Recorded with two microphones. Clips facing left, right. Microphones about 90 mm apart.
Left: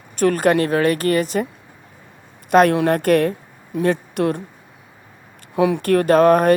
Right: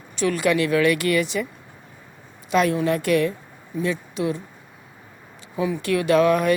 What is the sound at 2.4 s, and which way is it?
Speech, 55° left (ahead or behind).